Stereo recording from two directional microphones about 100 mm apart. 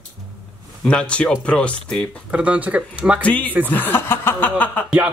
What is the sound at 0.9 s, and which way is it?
Speech, 10° left (ahead or behind).